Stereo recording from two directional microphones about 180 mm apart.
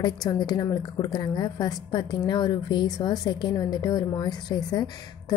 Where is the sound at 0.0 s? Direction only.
20° left (ahead or behind).